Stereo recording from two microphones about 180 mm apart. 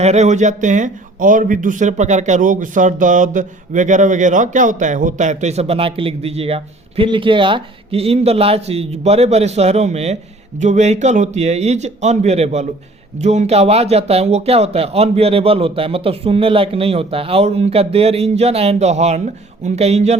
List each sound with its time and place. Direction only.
0.0 s a man's voice: 40° right (ahead or behind)